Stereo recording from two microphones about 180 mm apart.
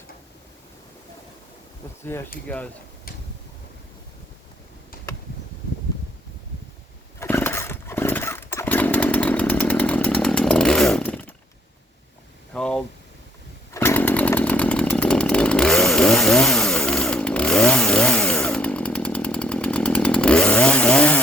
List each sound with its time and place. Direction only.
2.1 s speech: 15° left (ahead or behind)
7.2 s chainsaw: 10° left (ahead or behind)
12.5 s a sound: 5° left (ahead or behind)
13.7 s chainsaw: 10° left (ahead or behind)